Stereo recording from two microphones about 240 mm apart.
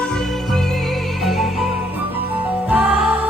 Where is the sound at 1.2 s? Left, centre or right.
Centre.